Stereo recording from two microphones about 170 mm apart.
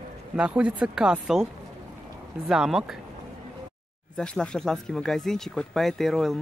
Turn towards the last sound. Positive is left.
turn(degrees=0)  # may be behind; listen again after turning